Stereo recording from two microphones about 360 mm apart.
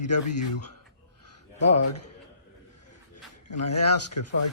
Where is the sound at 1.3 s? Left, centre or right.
Left.